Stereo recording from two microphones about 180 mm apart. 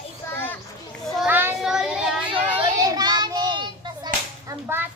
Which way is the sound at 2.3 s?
20° right (ahead or behind).